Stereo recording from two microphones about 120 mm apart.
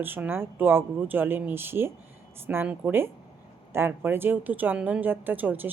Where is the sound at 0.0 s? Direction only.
15° right (ahead or behind).